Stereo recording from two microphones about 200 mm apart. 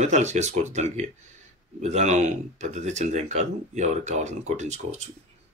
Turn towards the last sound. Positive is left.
turn(degrees=-35)  # may be behind; listen again after turning